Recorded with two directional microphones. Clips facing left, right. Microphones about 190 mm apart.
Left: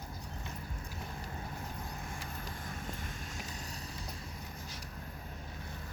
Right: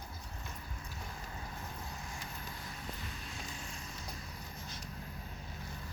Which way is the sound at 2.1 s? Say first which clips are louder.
Left 2 dB; 50° left (ahead or behind).